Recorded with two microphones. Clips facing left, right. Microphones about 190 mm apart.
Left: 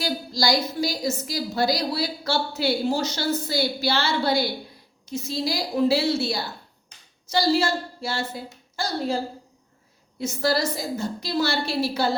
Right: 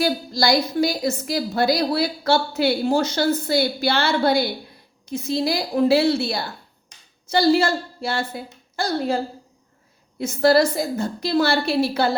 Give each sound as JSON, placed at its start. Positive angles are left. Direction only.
{"t": 0.0, "sound": "a woman's voice", "side_deg": -55}